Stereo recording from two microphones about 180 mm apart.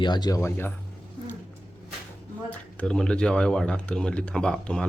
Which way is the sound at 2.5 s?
5° left (ahead or behind).